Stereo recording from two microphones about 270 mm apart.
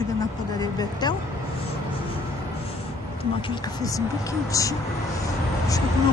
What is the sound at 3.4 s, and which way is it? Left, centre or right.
Speech, centre.